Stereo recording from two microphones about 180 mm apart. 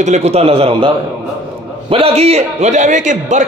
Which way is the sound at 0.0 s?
40° right (ahead or behind).